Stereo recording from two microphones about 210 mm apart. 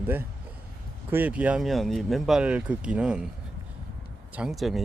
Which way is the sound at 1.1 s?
10° right (ahead or behind).